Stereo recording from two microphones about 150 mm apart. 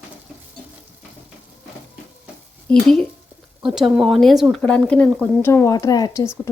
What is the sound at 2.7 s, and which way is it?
Speech, 5° left (ahead or behind).